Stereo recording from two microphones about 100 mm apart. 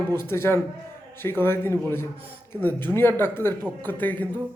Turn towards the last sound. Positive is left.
turn(degrees=15)  # may be behind; listen again after turning